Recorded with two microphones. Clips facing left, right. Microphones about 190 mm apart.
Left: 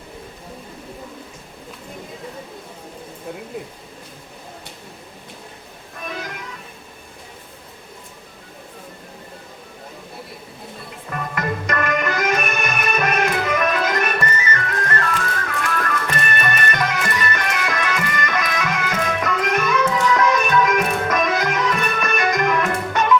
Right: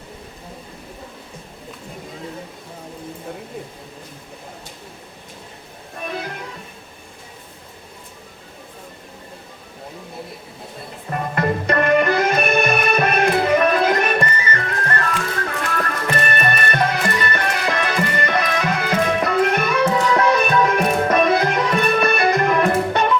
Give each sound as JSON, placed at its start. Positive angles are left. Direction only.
{"t": 11.1, "sound": "music", "side_deg": -35}